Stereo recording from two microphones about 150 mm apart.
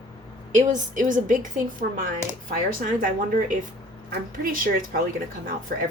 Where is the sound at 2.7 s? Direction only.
65° right (ahead or behind).